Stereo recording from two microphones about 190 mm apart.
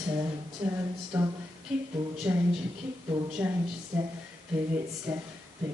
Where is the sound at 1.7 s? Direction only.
5° right (ahead or behind).